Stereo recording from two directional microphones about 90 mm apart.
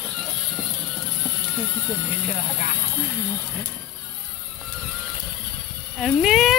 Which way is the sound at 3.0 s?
25° left (ahead or behind).